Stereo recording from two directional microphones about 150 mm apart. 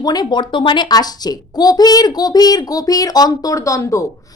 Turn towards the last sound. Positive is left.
turn(degrees=20)  # may be behind; listen again after turning